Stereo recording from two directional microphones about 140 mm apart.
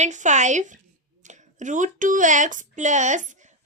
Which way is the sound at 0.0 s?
60° right (ahead or behind).